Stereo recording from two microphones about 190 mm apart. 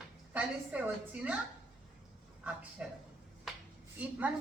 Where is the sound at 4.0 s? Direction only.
10° right (ahead or behind).